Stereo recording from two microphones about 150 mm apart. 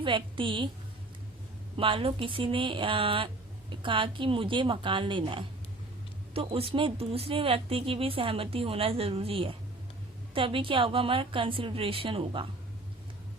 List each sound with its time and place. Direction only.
0.0 s speech: 35° right (ahead or behind)
1.7 s speech: 35° right (ahead or behind)